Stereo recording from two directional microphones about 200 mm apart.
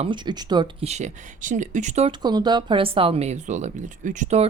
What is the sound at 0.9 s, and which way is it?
Speech, 35° right (ahead or behind).